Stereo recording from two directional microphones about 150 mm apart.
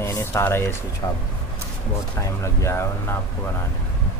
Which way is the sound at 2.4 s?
20° left (ahead or behind).